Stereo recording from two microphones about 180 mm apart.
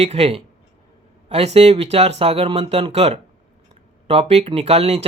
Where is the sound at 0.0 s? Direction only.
35° right (ahead or behind).